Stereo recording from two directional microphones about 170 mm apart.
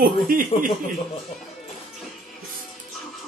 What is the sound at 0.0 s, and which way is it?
Speech, 55° right (ahead or behind).